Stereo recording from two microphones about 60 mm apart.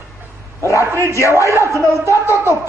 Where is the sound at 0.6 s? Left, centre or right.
Left.